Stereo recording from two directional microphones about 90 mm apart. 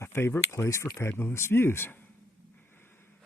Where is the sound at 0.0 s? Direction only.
30° left (ahead or behind).